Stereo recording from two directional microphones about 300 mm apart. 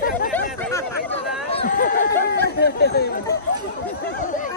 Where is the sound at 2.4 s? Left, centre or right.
Left.